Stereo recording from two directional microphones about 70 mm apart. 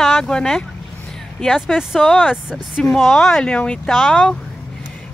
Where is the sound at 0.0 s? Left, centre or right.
Centre.